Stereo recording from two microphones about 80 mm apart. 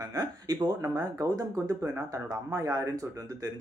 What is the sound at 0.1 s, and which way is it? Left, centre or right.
Speech, right.